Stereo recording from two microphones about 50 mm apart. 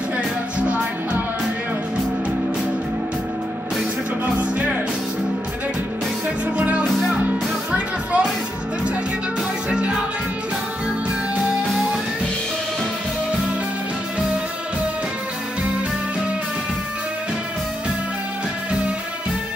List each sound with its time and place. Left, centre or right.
0.6 s music: right
4.4 s music: right
6.2 s music: right
9.7 s music: right